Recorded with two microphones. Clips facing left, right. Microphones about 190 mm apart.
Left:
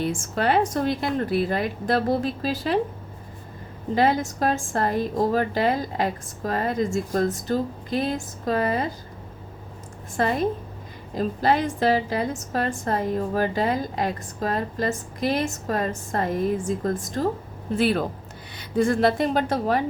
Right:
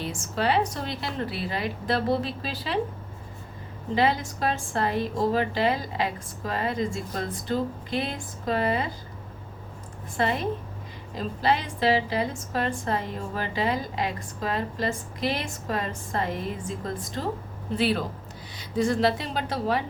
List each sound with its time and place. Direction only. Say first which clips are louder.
0.0 s a woman's voice: left 4 dB; 50° left (ahead or behind)
3.9 s a woman's voice: left 3 dB; 50° left (ahead or behind)
10.2 s a woman's voice: left 3 dB; 45° left (ahead or behind)